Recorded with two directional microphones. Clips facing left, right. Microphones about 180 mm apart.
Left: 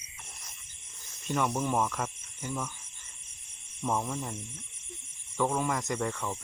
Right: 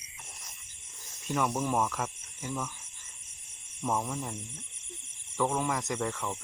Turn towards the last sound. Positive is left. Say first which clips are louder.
# left 1 dB
turn(degrees=0)  # may be behind; listen again after turning